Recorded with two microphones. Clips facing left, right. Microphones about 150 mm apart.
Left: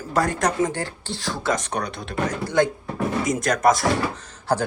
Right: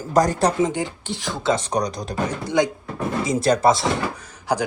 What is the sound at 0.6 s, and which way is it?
Speech, 20° right (ahead or behind).